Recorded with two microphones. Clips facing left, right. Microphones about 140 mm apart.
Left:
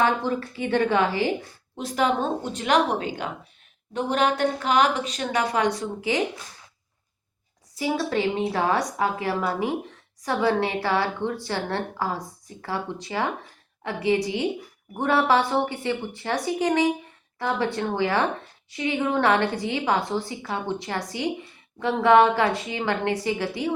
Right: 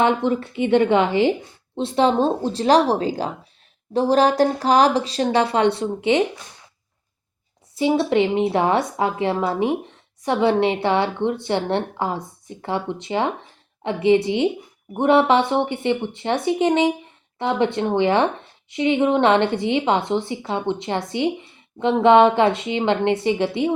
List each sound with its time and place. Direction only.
0.0 s a woman's voice: 20° right (ahead or behind)
7.8 s a woman's voice: 25° right (ahead or behind)